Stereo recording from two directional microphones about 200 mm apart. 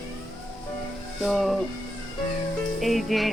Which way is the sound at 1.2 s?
Centre (ahead or behind).